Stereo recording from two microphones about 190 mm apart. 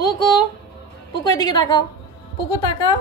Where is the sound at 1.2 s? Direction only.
20° left (ahead or behind).